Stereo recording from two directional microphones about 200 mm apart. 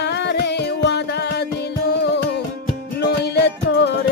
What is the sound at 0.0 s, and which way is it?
Music, 60° left (ahead or behind).